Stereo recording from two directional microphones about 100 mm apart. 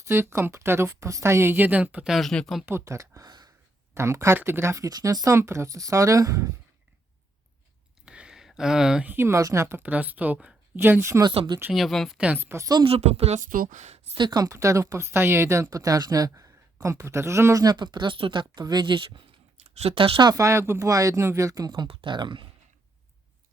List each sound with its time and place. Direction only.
0.0 s speech: 25° right (ahead or behind)
2.1 s speech: 5° left (ahead or behind)
2.6 s speech: 30° right (ahead or behind)
3.9 s speech: 30° right (ahead or behind)
8.0 s a sound: 10° right (ahead or behind)
9.1 s speech: 30° right (ahead or behind)
11.7 s speech: centre (ahead or behind)
12.1 s speech: 10° right (ahead or behind)
12.4 s speech: 25° right (ahead or behind)
12.8 s speech: 80° right
14.2 s speech: 40° right (ahead or behind)
20.3 s speech: 30° right (ahead or behind)
21.8 s speech: 50° right (ahead or behind)